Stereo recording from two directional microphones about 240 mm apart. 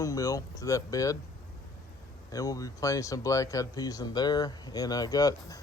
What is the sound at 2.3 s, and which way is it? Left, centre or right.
Speech, centre.